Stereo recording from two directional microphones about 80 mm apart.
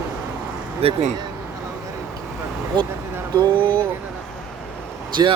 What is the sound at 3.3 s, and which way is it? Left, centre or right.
Speech, right.